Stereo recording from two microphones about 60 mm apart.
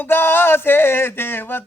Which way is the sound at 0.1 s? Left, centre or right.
Left.